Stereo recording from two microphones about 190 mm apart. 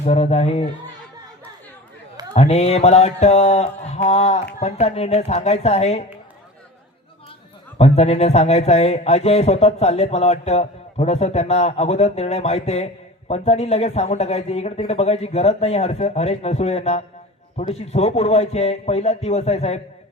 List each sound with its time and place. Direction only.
0.0 s a man's voice: 35° left (ahead or behind)
2.3 s a man's voice: 35° left (ahead or behind)
7.8 s a man's voice: 35° left (ahead or behind)